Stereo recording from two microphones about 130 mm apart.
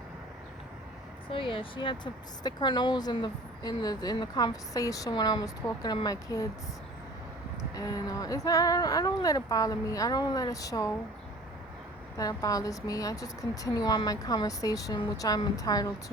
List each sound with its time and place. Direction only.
1.3 s speech: 40° left (ahead or behind); by 6.5 s 25° left (ahead or behind)
7.8 s speech: 25° left (ahead or behind)
12.1 s speech: 25° left (ahead or behind)